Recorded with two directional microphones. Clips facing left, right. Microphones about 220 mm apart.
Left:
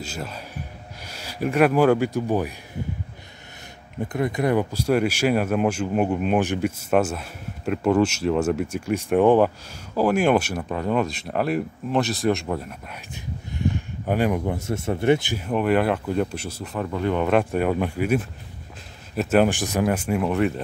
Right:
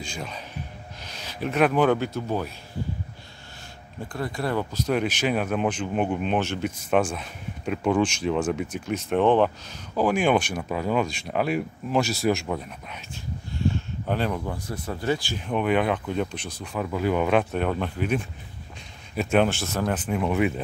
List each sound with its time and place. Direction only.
0.0 s speech: 5° left (ahead or behind)
4.1 s speech: 20° left (ahead or behind); by 13.0 s 5° left (ahead or behind)
13.6 s a sound: 15° left (ahead or behind)
14.4 s speech: 25° left (ahead or behind)
15.3 s speech: 5° left (ahead or behind)
17.5 s speech: 10° left (ahead or behind)